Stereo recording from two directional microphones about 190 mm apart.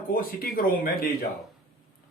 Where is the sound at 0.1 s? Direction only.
50° left (ahead or behind).